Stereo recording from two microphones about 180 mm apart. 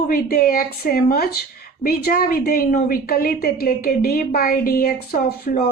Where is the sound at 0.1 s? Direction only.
55° left (ahead or behind).